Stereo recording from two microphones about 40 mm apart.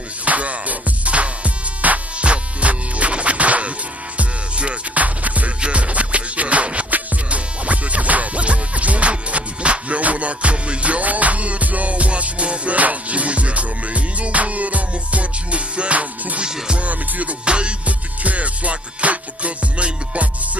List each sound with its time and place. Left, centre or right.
0.2 s music: right
17.5 s music: right
18.2 s music: right